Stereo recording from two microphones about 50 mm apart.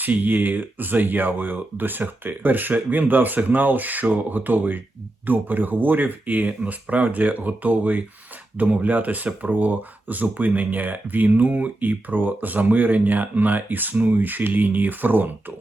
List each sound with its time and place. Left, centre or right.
0.0 s speech: right